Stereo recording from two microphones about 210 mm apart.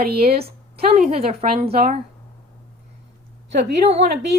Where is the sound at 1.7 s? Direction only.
45° right (ahead or behind).